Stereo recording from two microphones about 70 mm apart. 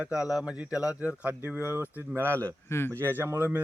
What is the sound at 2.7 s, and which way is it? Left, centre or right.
Speech, left.